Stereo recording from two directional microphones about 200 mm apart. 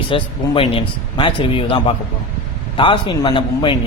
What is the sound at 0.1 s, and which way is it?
A man's voice, 25° left (ahead or behind).